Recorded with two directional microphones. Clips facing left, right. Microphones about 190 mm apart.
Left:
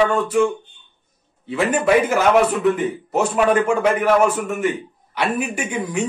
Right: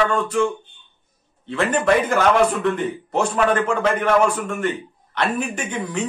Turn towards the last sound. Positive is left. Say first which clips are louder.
# left 2 dB
turn(degrees=10)  # may be behind; listen again after turning